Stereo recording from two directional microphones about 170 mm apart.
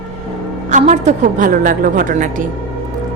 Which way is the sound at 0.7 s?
45° right (ahead or behind).